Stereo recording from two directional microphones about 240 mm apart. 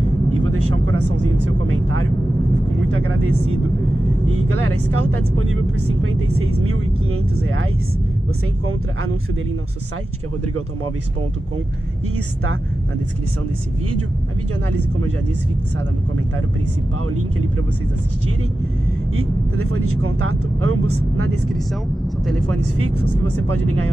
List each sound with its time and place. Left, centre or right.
0.3 s speech: right
14.8 s speech: right
19.1 s speech: right
22.2 s speech: centre
22.6 s speech: right